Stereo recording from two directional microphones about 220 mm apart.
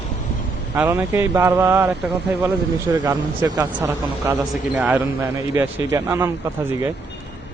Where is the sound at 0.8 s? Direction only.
10° right (ahead or behind).